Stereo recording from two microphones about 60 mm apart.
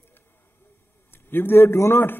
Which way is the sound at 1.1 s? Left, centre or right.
Left.